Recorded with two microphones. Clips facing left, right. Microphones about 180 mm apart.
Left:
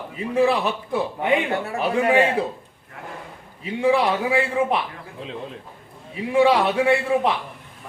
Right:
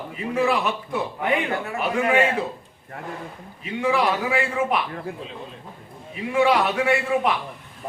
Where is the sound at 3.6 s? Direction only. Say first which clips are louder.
Left 3 dB; 30° left (ahead or behind).